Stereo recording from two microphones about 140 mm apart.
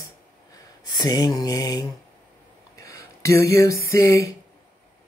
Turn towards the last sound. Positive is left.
turn(degrees=20)  # may be behind; listen again after turning